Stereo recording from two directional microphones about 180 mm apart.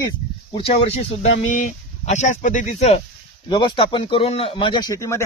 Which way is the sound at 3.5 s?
30° left (ahead or behind).